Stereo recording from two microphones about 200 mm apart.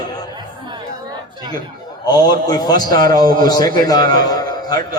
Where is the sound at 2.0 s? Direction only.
20° left (ahead or behind).